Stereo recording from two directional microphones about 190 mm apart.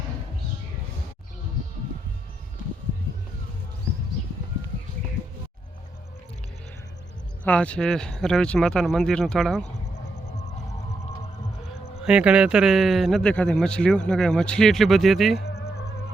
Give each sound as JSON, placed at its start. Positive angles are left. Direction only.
{"t": 7.4, "sound": "speech", "side_deg": 5}
{"t": 12.0, "sound": "speech", "side_deg": -5}
{"t": 15.4, "sound": "music", "side_deg": 60}